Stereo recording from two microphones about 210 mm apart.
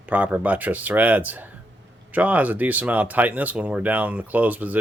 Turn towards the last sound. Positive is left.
turn(degrees=-5)  # may be behind; listen again after turning